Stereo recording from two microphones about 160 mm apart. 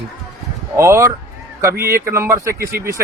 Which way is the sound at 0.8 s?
15° right (ahead or behind).